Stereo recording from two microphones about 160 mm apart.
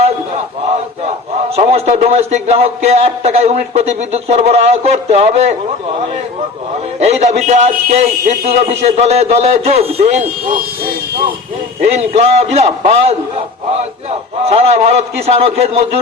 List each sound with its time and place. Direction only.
1.5 s a man's voice: 40° right (ahead or behind)
7.0 s a man's voice: 45° right (ahead or behind)
11.9 s a man's voice: 40° right (ahead or behind)
14.4 s a man's voice: 40° right (ahead or behind)